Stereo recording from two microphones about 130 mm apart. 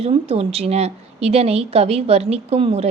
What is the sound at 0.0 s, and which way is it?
A woman's voice, 50° right (ahead or behind).